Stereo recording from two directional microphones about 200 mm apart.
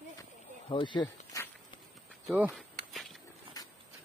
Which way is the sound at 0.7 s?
25° left (ahead or behind).